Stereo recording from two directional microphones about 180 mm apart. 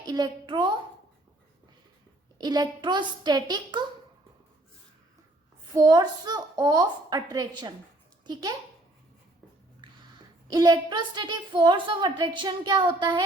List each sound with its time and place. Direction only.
0.0 s a woman's voice: 20° right (ahead or behind)
2.4 s a woman's voice: 20° right (ahead or behind)
5.7 s a woman's voice: 20° right (ahead or behind)
10.5 s a woman's voice: 20° right (ahead or behind)